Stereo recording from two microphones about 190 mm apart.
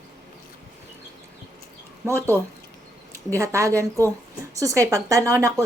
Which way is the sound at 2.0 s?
15° right (ahead or behind).